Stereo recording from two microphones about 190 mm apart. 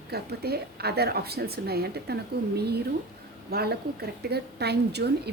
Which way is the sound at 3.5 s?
55° right (ahead or behind).